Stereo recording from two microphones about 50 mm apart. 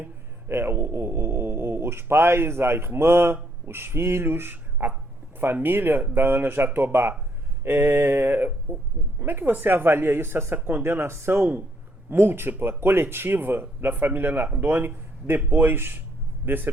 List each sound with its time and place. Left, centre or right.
0.0 s speech: right
11.0 s speech: right
11.3 s speech: right